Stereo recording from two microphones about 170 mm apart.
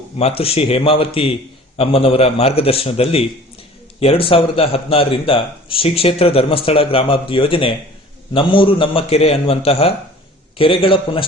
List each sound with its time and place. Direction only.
0.2 s speech: 35° left (ahead or behind)